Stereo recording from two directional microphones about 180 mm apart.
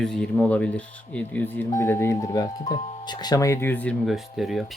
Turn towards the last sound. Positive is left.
turn(degrees=0)  # may be behind; listen again after turning